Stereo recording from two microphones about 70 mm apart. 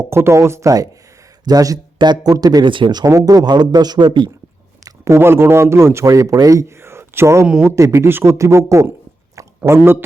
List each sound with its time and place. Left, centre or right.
0.0 s speech: right
1.5 s speech: right
3.1 s speech: right
5.0 s speech: right
6.1 s speech: right
6.8 s a sound: right
7.6 s speech: right